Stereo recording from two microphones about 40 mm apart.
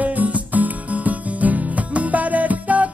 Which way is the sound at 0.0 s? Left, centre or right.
Right.